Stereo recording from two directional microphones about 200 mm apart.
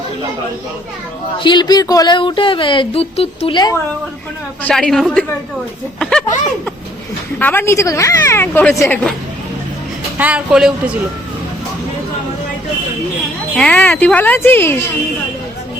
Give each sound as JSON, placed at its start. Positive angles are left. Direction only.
{"t": 1.4, "sound": "speech", "side_deg": 20}
{"t": 4.6, "sound": "speech", "side_deg": 5}
{"t": 7.3, "sound": "speech", "side_deg": 10}
{"t": 10.2, "sound": "speech", "side_deg": -5}
{"t": 13.6, "sound": "speech", "side_deg": 5}